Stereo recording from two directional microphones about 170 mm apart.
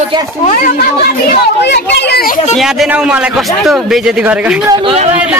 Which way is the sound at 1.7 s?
80° left.